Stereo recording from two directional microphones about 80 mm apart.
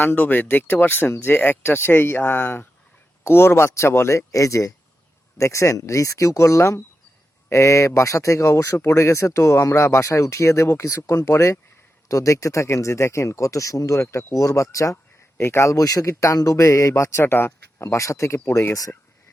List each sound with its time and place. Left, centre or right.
0.0 s speech: left
17.8 s speech: left